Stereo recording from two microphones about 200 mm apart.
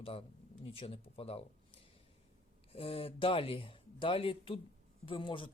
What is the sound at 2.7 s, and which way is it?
Speech, 30° left (ahead or behind).